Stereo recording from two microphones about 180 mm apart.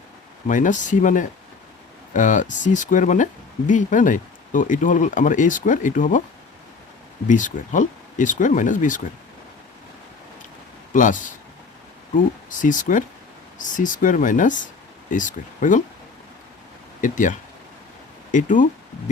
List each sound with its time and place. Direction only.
0.4 s speech: 45° left (ahead or behind)
7.3 s speech: 45° left (ahead or behind)
10.9 s speech: 45° left (ahead or behind)
17.0 s speech: 45° left (ahead or behind)